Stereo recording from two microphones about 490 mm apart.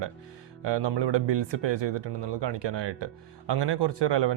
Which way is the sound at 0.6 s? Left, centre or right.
Right.